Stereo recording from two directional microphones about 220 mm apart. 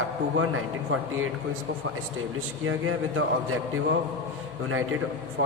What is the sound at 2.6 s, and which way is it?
Speech, 70° right (ahead or behind).